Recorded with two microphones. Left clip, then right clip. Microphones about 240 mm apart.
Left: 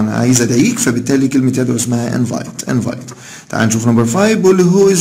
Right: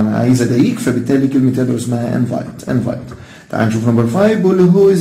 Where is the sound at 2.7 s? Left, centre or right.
Left.